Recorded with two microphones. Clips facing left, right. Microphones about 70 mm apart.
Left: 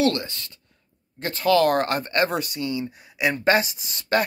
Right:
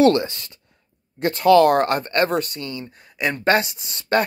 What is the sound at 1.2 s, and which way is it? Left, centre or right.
Speech, centre.